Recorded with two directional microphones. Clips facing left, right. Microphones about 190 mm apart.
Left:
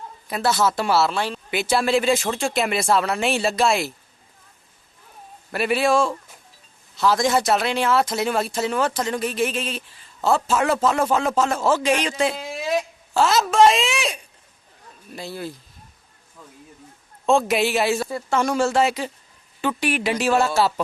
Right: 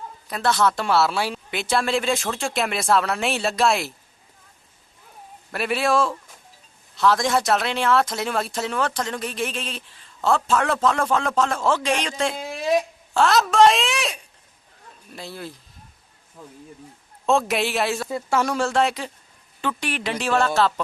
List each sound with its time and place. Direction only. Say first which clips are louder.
0.3 s speech: even; 5° left (ahead or behind)
1.5 s speech: left 5 dB; 5° left (ahead or behind)
5.5 s speech: left 2 dB; centre (ahead or behind)
17.2 s speech: left 2 dB; centre (ahead or behind)